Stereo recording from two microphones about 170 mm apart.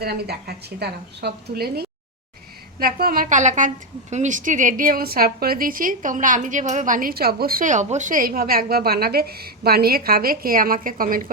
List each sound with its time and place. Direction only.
0.0 s a woman's voice: 70° right (ahead or behind)